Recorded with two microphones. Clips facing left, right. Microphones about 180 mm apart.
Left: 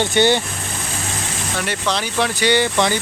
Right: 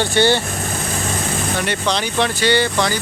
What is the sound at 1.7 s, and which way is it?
Speech, centre (ahead or behind).